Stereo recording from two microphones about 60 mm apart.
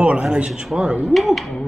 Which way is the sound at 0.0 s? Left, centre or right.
Centre.